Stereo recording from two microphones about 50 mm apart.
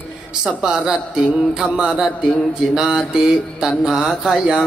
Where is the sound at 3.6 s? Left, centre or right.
Centre.